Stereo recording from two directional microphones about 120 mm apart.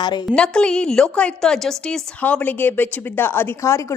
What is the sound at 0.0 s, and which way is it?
Speech, 40° left (ahead or behind).